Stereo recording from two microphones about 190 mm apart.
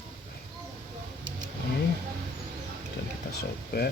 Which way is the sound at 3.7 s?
55° left (ahead or behind).